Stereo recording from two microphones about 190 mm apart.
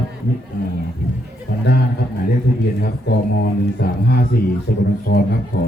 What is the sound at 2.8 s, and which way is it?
A man's voice, 55° left (ahead or behind).